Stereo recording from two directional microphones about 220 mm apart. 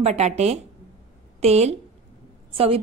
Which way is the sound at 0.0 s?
30° right (ahead or behind).